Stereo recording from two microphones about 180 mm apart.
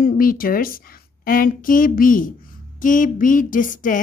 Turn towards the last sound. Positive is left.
turn(degrees=45)  # may be behind; listen again after turning